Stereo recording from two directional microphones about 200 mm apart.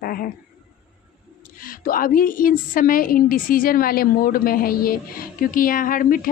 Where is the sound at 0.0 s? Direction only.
45° left (ahead or behind).